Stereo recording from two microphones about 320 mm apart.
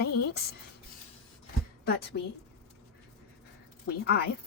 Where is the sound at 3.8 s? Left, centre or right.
Left.